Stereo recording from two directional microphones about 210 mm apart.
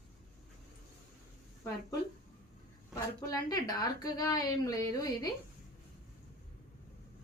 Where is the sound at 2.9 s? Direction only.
15° left (ahead or behind).